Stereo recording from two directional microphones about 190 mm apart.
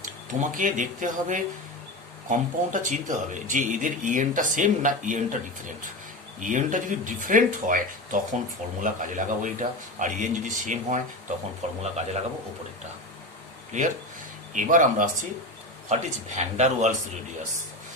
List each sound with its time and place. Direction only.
0.0 s speech: 45° right (ahead or behind)
14.5 s speech: 45° right (ahead or behind)